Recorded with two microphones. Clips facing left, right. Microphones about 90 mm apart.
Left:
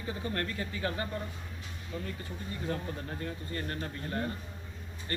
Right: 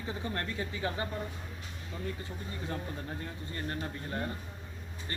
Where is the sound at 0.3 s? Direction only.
20° right (ahead or behind).